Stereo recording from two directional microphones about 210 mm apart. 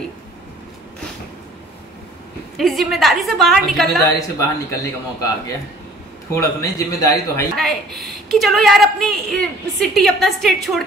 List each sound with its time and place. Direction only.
2.5 s a woman's voice: centre (ahead or behind)
4.0 s a man's voice: 15° left (ahead or behind)
6.3 s a man's voice: 15° left (ahead or behind)
7.5 s a woman's voice: centre (ahead or behind)